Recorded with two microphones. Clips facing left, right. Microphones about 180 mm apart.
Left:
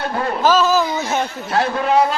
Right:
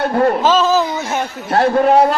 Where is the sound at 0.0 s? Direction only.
50° right (ahead or behind).